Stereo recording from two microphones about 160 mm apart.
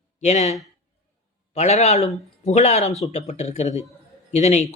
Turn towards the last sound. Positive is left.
turn(degrees=45)  # may be behind; listen again after turning